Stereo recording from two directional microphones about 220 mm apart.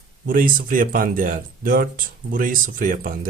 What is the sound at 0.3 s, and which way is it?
Speech, 40° right (ahead or behind).